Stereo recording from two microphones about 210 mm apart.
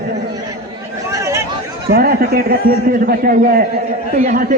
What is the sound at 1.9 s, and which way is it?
A man's voice, 45° right (ahead or behind).